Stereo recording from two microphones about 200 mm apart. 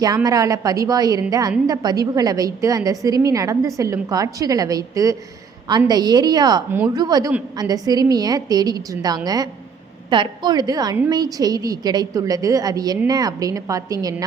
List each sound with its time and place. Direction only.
0.0 s a woman's voice: 20° right (ahead or behind)